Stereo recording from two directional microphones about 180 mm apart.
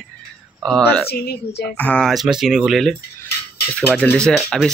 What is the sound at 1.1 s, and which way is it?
Speech, 60° left (ahead or behind).